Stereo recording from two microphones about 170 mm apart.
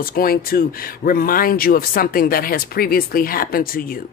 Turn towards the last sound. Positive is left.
turn(degrees=60)  # may be behind; listen again after turning